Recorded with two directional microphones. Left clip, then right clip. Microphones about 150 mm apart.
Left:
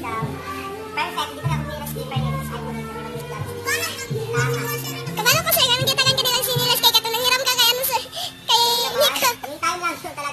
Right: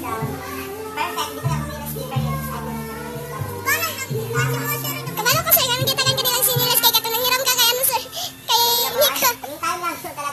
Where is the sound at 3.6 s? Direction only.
30° right (ahead or behind).